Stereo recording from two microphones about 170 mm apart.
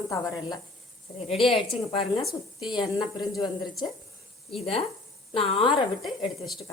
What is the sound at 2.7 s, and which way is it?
Speech, 25° left (ahead or behind).